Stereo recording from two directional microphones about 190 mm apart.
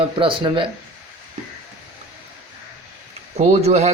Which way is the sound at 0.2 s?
25° right (ahead or behind).